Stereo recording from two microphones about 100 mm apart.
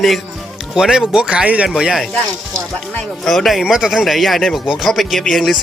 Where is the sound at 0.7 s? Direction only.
5° right (ahead or behind).